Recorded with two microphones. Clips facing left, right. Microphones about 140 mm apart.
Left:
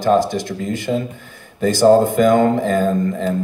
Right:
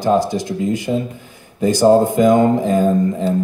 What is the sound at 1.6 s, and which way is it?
Speech, 15° right (ahead or behind).